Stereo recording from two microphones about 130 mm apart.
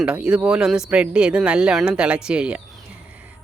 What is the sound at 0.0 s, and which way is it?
Speech, 5° right (ahead or behind).